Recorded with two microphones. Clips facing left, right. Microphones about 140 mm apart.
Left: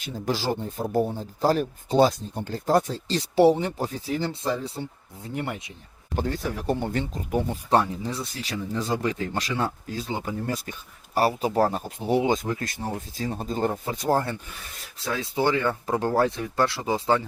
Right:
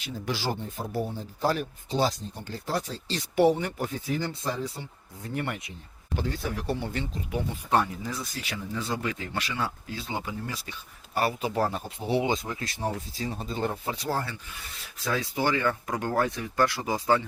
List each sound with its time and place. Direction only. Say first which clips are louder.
0.0 s speech: left 4 dB; 45° left (ahead or behind)
2.0 s speech: left 7 dB; 55° left (ahead or behind)
3.2 s speech: left 4 dB; 35° left (ahead or behind)
6.1 s speech: left 3 dB; 45° left (ahead or behind)
15.2 s speech: left 4 dB; 25° left (ahead or behind)